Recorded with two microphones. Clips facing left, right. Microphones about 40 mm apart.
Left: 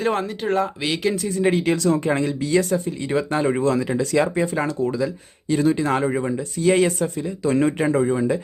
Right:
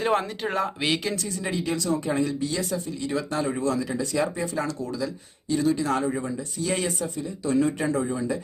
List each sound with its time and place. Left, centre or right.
0.0 s speech: centre
1.4 s speech: left
2.6 s speech: left
4.5 s speech: left
5.5 s speech: left
7.2 s speech: left
7.8 s speech: left